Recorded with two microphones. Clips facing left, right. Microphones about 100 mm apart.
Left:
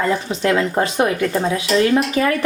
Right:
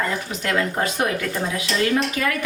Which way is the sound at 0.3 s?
25° left (ahead or behind).